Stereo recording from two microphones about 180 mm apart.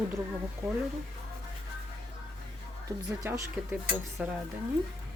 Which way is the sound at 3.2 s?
15° right (ahead or behind).